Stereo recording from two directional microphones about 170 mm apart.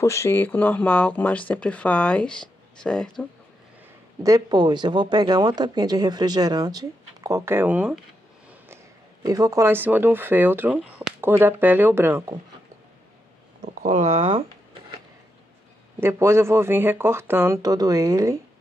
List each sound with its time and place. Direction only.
0.0 s speech: 15° left (ahead or behind)
4.2 s speech: 25° right (ahead or behind)
9.2 s speech: 20° right (ahead or behind)
13.8 s speech: 40° right (ahead or behind)
16.0 s speech: 15° right (ahead or behind)